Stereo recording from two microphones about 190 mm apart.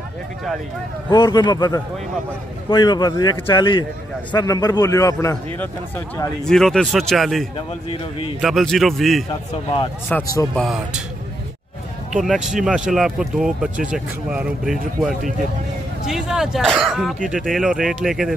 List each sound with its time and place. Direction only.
1.1 s a man's voice: 25° left (ahead or behind)
6.4 s speech: centre (ahead or behind)
7.5 s a man's voice: 30° left (ahead or behind)
8.4 s speech: centre (ahead or behind)
10.0 s speech: 15° left (ahead or behind)
10.5 s speech: centre (ahead or behind)
12.2 s speech: centre (ahead or behind)